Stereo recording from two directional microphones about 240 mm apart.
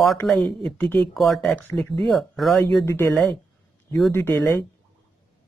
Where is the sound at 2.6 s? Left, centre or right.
Centre.